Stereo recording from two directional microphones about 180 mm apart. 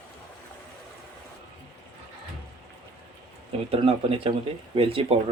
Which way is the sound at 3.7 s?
30° right (ahead or behind).